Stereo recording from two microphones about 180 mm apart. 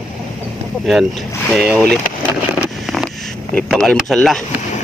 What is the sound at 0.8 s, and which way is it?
Speech, centre (ahead or behind).